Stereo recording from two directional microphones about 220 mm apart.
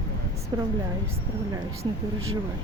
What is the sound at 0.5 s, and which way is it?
Speech, 20° right (ahead or behind).